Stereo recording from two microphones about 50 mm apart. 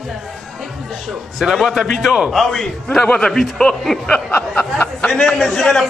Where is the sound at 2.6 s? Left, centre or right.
Centre.